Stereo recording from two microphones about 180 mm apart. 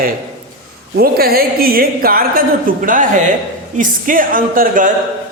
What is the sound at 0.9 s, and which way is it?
A woman's voice, 55° right (ahead or behind).